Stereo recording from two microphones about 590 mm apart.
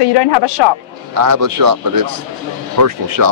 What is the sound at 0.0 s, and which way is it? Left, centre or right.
Speech, left.